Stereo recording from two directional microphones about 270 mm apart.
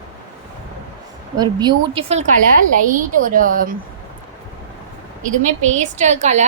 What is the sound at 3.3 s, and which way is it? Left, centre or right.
Speech, right.